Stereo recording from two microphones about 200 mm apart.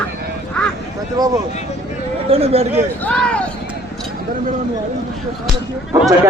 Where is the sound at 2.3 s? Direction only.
30° right (ahead or behind).